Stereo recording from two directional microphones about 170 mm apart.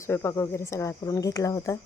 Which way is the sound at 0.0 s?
15° left (ahead or behind).